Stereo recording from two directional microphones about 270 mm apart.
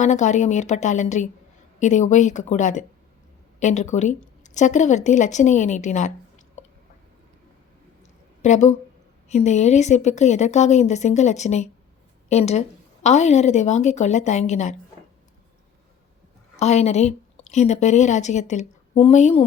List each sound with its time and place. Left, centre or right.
0.0 s a woman's voice: left
8.4 s a woman's voice: left
16.6 s speech: left